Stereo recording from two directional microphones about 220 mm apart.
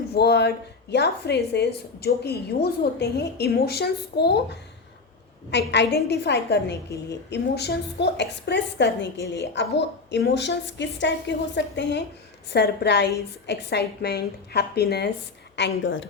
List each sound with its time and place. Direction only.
0.1 s a woman's voice: 50° left (ahead or behind)